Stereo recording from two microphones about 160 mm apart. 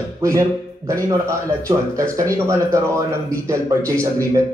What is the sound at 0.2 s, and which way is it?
Speech, 20° right (ahead or behind).